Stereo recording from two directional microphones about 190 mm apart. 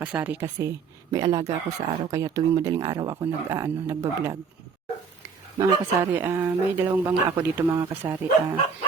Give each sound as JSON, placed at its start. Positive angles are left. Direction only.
{"t": 0.0, "sound": "speech", "side_deg": -10}
{"t": 5.5, "sound": "speech", "side_deg": -15}